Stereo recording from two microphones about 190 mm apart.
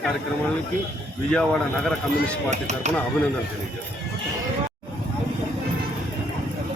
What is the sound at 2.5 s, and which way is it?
Speech, 35° right (ahead or behind).